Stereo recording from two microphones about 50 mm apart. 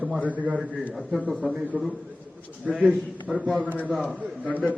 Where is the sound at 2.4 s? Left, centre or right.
Left.